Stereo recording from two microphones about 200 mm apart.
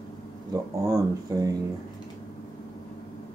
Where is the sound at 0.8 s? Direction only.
15° right (ahead or behind).